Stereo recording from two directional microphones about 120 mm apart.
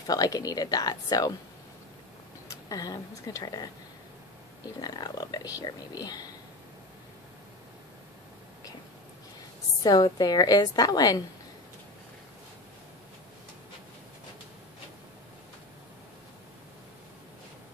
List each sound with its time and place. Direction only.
0.0 s speech: 30° left (ahead or behind)
2.7 s speech: 30° left (ahead or behind)
4.7 s speech: 35° left (ahead or behind)
9.8 s speech: 35° left (ahead or behind)